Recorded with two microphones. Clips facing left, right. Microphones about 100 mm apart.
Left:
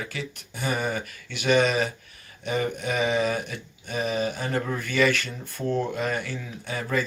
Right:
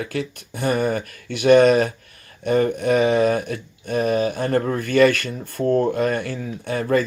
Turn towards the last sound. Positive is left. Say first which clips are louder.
# right 8 dB
turn(degrees=-50)  # may be behind; listen again after turning